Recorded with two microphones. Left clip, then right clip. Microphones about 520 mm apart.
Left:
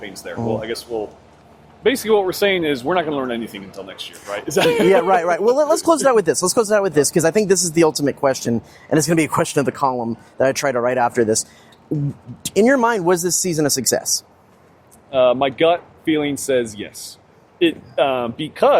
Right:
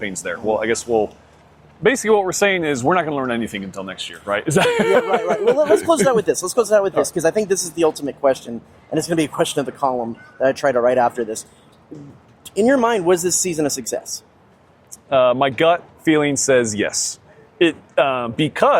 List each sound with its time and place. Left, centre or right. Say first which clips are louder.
0.0 s speech: right 3 dB; right
5.0 s speech: left 2 dB; left
12.5 s speech: left 1 dB; left
15.1 s speech: right 1 dB; right